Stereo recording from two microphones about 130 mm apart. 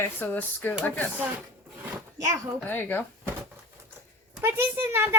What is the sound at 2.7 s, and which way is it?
Speech, 15° left (ahead or behind).